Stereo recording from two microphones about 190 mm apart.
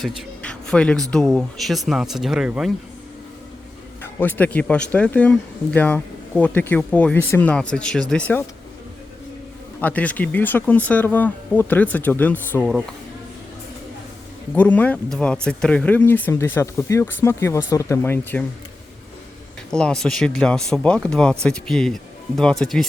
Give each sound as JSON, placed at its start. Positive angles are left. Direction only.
{"t": 0.4, "sound": "a sound", "side_deg": 5}
{"t": 1.1, "sound": "speech", "side_deg": 0}
{"t": 4.0, "sound": "speech", "side_deg": 10}
{"t": 9.8, "sound": "speech", "side_deg": 10}
{"t": 14.5, "sound": "speech", "side_deg": 10}
{"t": 19.7, "sound": "speech", "side_deg": 5}